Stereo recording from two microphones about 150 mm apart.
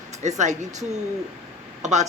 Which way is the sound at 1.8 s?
50° right (ahead or behind).